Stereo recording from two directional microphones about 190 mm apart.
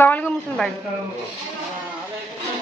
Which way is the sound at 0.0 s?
10° left (ahead or behind).